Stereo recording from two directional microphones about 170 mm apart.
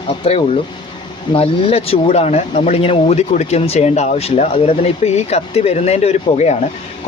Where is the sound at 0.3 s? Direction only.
35° left (ahead or behind).